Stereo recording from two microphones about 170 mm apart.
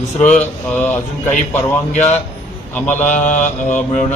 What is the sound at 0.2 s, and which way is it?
Speech, 5° left (ahead or behind).